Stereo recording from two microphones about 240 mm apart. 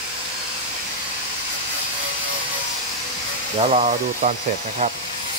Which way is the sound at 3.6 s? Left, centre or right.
Right.